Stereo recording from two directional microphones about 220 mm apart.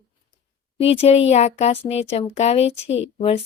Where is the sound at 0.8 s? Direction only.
25° left (ahead or behind).